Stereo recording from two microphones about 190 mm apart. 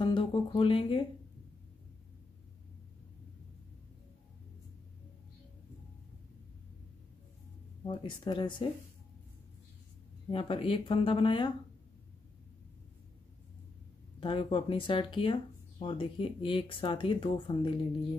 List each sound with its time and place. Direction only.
0.0 s a sound: 25° left (ahead or behind)
7.8 s speech: 25° left (ahead or behind)
10.3 s speech: 30° left (ahead or behind)
14.2 s speech: 30° left (ahead or behind)